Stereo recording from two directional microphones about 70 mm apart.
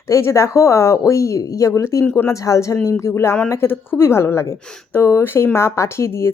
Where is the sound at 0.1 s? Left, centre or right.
Left.